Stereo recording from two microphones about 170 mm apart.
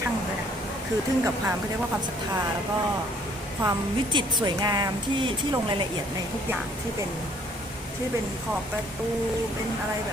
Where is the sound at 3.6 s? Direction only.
25° right (ahead or behind).